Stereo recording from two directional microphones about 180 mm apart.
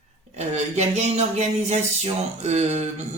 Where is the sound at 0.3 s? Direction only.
40° right (ahead or behind).